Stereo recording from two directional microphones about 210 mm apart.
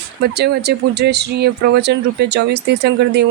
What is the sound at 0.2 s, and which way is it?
Speech, 50° right (ahead or behind).